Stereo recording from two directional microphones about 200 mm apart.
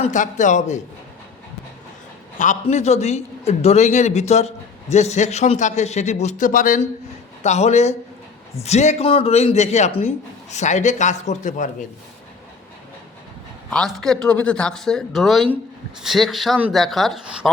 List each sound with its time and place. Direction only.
0.0 s a man's voice: 40° left (ahead or behind)
2.4 s a man's voice: 35° left (ahead or behind)
13.7 s speech: 5° left (ahead or behind)